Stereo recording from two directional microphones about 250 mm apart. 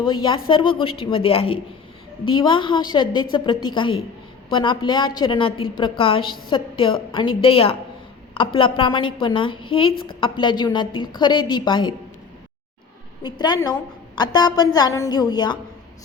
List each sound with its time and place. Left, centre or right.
0.1 s a woman's voice: centre
13.2 s a woman's voice: centre